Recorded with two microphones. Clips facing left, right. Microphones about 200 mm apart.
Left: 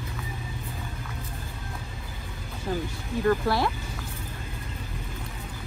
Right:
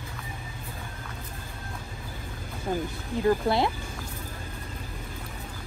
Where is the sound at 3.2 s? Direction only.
20° right (ahead or behind).